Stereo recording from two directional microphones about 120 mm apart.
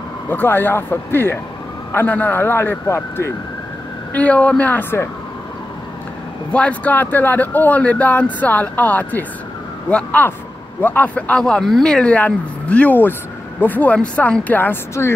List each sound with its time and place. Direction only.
0.3 s speech: 15° left (ahead or behind)
6.5 s speech: 10° left (ahead or behind)